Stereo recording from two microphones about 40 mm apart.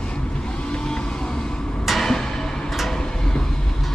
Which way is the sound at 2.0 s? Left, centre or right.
Centre.